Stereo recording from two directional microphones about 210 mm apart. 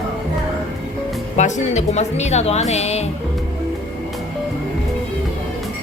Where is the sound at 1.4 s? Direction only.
35° left (ahead or behind).